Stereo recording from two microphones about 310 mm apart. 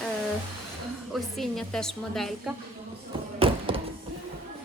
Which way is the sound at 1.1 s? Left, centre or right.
Centre.